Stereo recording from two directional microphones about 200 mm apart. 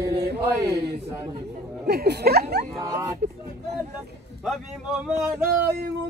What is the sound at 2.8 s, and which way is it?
Male singing, 15° right (ahead or behind).